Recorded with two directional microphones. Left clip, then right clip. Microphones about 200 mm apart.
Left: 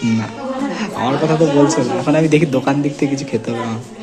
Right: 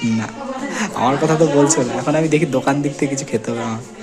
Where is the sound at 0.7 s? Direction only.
25° right (ahead or behind).